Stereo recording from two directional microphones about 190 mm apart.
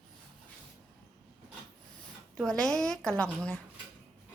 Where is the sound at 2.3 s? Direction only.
5° left (ahead or behind).